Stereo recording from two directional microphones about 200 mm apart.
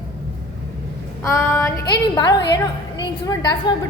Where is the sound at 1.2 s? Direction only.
15° left (ahead or behind).